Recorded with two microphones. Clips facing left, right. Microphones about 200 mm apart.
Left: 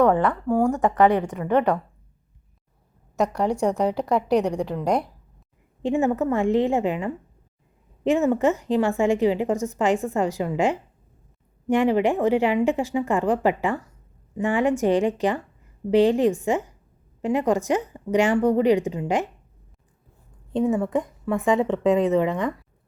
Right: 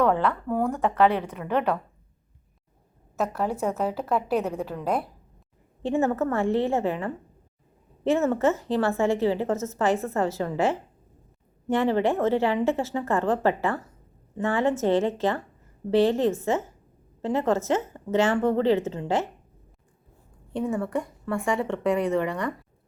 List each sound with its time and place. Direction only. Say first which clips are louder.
0.0 s a woman's voice: left 4 dB; 15° left (ahead or behind)
3.2 s a woman's voice: left 4 dB; 5° right (ahead or behind)
4.6 s a woman's voice: left 4 dB; 15° left (ahead or behind)
20.5 s a woman's voice: left 5 dB; 20° left (ahead or behind)